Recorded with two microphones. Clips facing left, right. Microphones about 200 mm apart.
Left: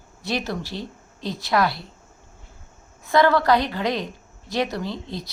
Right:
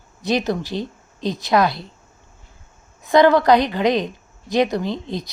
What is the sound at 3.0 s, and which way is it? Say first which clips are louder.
A woman's voice: right 5 dB; 20° right (ahead or behind).